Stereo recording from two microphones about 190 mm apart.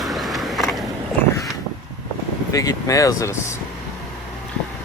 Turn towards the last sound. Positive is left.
turn(degrees=15)  # may be behind; listen again after turning